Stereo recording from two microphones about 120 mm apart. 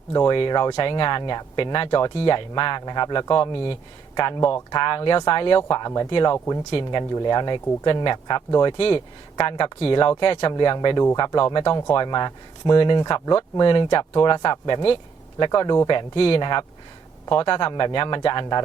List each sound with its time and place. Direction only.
0.3 s speech: 40° left (ahead or behind)
5.6 s speech: 30° left (ahead or behind)
6.1 s speech: 45° left (ahead or behind)
6.3 s speech: 25° left (ahead or behind)
6.7 s speech: 45° left (ahead or behind)
7.1 s speech: 35° left (ahead or behind)
15.9 s speech: 45° left (ahead or behind)